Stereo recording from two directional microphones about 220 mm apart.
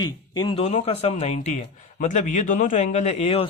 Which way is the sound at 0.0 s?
20° left (ahead or behind).